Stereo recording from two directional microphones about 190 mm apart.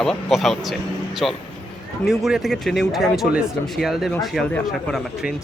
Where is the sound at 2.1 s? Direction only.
Centre (ahead or behind).